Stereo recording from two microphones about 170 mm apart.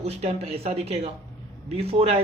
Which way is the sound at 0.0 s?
40° right (ahead or behind).